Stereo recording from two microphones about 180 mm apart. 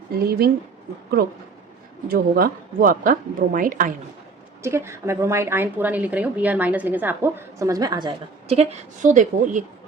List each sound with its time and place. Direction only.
0.3 s a woman's voice: 60° right (ahead or behind)
2.0 s speech: 55° right (ahead or behind)
4.6 s a woman's voice: 15° right (ahead or behind)
8.4 s speech: 40° right (ahead or behind)